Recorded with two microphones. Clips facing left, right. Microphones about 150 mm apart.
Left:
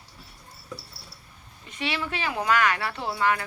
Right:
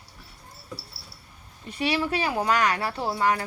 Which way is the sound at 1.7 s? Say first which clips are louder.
Right 5 dB; 35° right (ahead or behind).